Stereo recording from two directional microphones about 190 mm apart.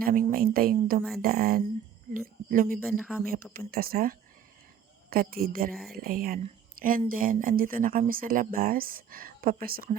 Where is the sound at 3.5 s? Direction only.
50° right (ahead or behind).